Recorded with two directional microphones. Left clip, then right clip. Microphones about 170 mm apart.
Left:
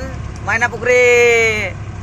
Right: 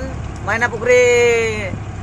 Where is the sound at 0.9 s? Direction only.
5° left (ahead or behind).